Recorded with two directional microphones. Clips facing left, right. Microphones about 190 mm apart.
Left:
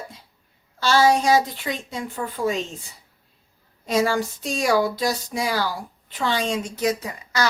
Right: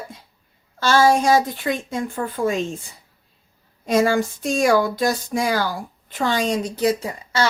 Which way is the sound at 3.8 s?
50° right (ahead or behind).